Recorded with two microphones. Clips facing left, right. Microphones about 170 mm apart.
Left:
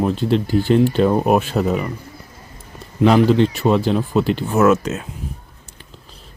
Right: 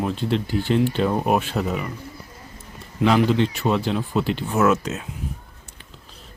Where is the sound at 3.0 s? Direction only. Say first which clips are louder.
Left 5 dB; 40° left (ahead or behind).